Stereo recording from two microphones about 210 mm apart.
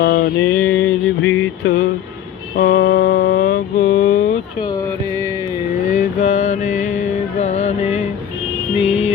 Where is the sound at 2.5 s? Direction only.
55° left (ahead or behind).